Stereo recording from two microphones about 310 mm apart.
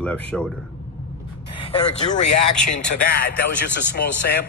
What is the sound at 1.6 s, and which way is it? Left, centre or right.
Speech, centre.